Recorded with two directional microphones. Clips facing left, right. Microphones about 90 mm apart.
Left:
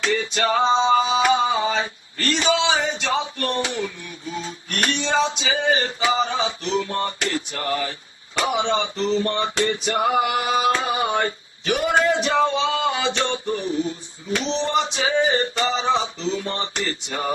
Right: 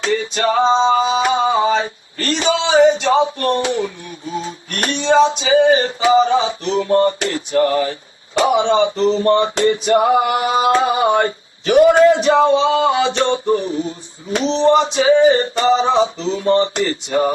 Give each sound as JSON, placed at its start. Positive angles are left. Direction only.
{"t": 0.0, "sound": "male singing", "side_deg": -35}